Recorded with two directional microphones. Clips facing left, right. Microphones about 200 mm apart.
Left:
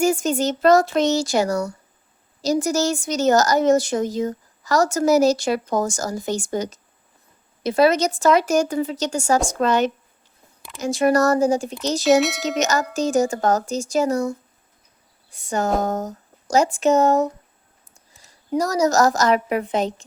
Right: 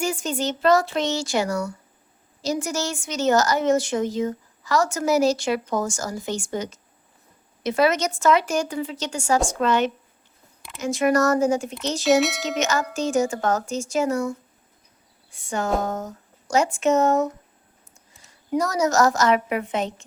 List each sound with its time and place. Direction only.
0.0 s a woman's voice: 45° left (ahead or behind)
12.0 s speech: centre (ahead or behind)
12.5 s a woman's voice: 40° left (ahead or behind)